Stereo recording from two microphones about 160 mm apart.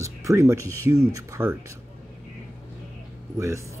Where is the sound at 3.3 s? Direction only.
20° right (ahead or behind).